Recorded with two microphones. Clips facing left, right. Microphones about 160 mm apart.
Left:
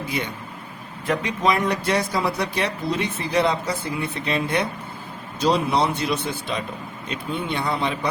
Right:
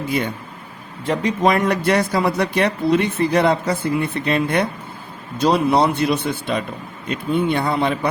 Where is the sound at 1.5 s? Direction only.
55° right (ahead or behind).